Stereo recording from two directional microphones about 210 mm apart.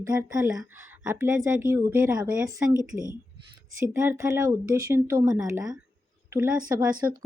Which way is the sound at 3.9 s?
10° right (ahead or behind).